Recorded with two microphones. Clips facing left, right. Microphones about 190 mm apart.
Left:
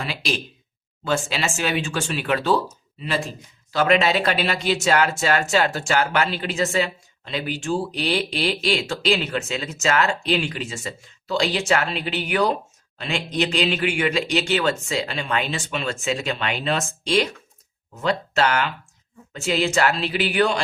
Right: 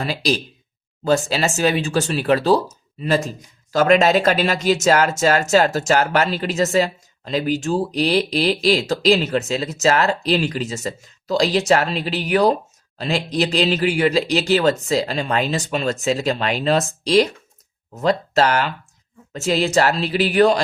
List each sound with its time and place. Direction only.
0.0 s speech: 40° right (ahead or behind)